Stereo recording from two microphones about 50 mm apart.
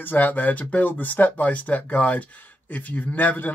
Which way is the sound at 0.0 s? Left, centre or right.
Left.